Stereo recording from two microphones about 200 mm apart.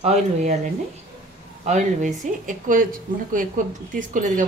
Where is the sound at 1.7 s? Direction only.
40° right (ahead or behind).